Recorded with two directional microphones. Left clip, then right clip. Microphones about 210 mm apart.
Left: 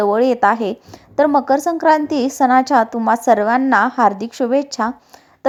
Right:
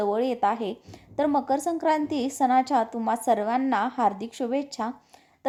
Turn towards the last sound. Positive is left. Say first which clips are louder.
# left 11 dB
turn(degrees=20)  # may be behind; listen again after turning